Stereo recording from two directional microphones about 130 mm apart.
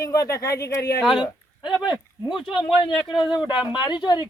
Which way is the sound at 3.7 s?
35° left (ahead or behind).